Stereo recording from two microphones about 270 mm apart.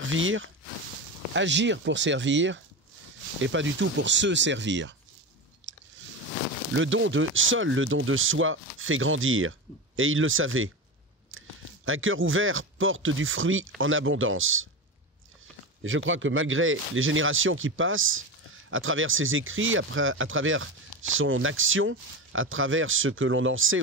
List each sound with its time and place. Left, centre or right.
0.0 s speech: right
5.6 s chewing: right
6.7 s speech: right
15.8 s speech: right